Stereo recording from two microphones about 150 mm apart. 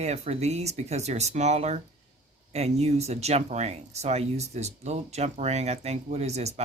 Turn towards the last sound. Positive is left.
turn(degrees=-45)  # may be behind; listen again after turning